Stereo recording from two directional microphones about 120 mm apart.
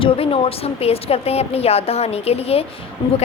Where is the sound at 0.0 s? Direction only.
50° left (ahead or behind).